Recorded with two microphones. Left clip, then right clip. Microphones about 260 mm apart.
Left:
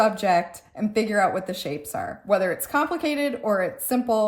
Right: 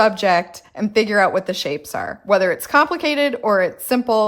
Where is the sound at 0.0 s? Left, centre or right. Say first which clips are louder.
Right 5 dB; right.